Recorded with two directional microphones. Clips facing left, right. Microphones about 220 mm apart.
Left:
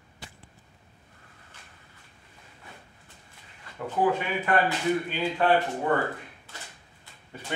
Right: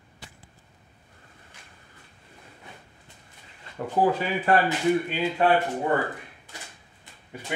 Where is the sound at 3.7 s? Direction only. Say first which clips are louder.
Right 6 dB; 25° right (ahead or behind).